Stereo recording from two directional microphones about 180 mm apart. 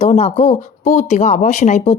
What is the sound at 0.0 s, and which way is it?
Speech, 35° left (ahead or behind).